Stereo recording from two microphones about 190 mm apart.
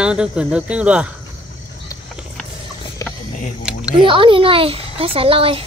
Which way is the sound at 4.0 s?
25° right (ahead or behind).